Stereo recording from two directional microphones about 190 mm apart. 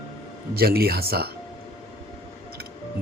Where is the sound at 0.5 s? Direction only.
55° right (ahead or behind).